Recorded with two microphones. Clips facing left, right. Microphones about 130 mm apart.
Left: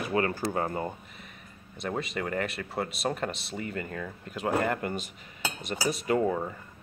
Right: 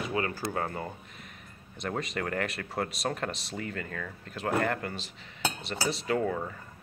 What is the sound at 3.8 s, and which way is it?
Cutlery, 20° left (ahead or behind).